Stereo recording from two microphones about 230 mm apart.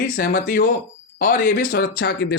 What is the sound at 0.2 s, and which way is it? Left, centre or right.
Speech, left.